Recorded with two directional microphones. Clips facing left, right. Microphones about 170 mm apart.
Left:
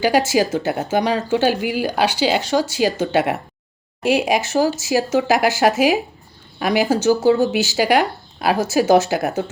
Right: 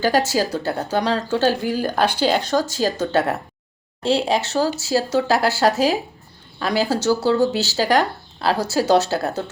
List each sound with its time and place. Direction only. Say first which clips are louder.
0.3 s speech: left 3 dB; 15° left (ahead or behind)